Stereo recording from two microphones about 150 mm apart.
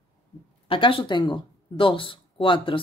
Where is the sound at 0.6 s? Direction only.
35° left (ahead or behind).